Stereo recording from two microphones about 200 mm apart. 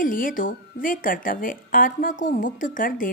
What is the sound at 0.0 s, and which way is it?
A woman's voice, 45° left (ahead or behind).